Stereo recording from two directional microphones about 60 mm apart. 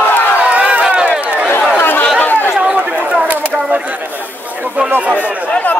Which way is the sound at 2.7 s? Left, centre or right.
Right.